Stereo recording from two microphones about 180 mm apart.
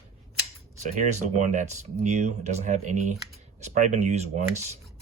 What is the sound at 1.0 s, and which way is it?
Speech, 40° right (ahead or behind).